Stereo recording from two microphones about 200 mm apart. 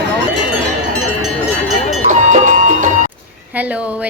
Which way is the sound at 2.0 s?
35° right (ahead or behind).